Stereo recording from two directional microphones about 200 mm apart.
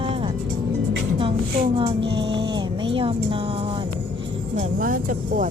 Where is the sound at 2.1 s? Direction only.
60° right (ahead or behind).